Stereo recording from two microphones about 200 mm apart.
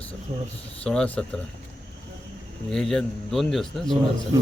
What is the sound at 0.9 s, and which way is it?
Speech, 5° left (ahead or behind).